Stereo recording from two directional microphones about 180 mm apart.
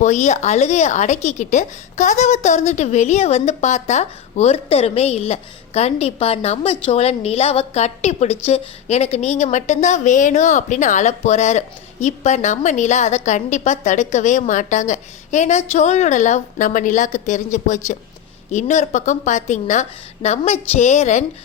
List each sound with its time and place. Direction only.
0.0 s a woman's voice: 40° left (ahead or behind)